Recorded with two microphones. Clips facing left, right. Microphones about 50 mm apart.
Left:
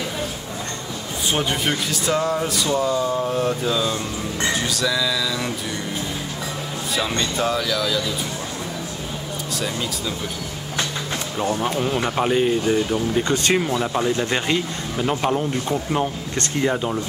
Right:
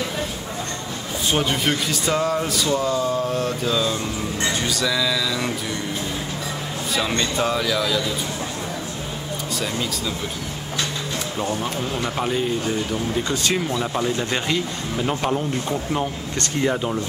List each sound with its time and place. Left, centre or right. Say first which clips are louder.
1.3 s speech: right 1 dB; centre
7.1 s speech: even; centre
9.6 s speech: even; centre
11.4 s speech: left 6 dB; left
13.3 s speech: left 4 dB; left
13.7 s speech: left 2 dB; centre